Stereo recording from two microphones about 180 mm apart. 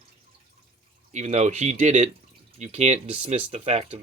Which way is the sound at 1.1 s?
40° right (ahead or behind).